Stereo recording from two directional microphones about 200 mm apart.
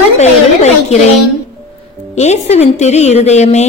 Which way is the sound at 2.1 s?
35° left (ahead or behind).